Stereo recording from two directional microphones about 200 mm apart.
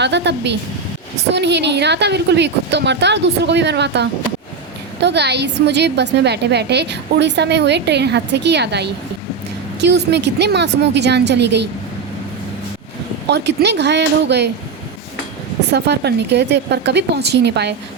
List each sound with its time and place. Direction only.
0.0 s a woman's voice: 60° right (ahead or behind)
13.2 s a woman's voice: 55° right (ahead or behind)
15.7 s a woman's voice: 55° right (ahead or behind)